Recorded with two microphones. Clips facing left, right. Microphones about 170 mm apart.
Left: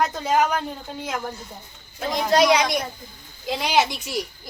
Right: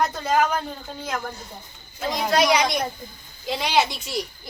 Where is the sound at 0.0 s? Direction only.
5° left (ahead or behind).